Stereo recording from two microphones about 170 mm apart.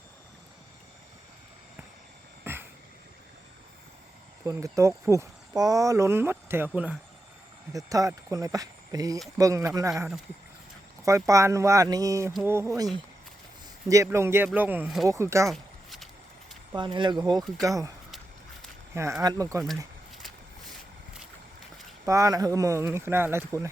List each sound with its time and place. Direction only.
2.4 s a sound: 10° right (ahead or behind)
4.4 s speech: 20° right (ahead or behind)
7.7 s speech: 20° right (ahead or behind)
11.0 s speech: 20° right (ahead or behind)
15.4 s a sound: centre (ahead or behind)
16.7 s speech: 30° right (ahead or behind)
18.9 s speech: 15° right (ahead or behind)
22.0 s speech: 20° right (ahead or behind)